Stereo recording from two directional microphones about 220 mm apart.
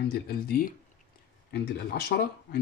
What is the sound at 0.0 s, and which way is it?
Speech, 45° left (ahead or behind).